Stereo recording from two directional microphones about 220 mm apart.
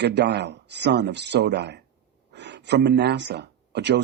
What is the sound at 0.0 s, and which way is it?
Speech, 50° right (ahead or behind).